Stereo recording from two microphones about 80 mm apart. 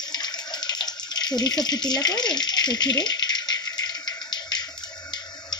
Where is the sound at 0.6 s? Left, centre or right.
Left.